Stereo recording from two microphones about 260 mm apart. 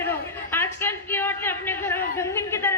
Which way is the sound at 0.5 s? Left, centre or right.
Centre.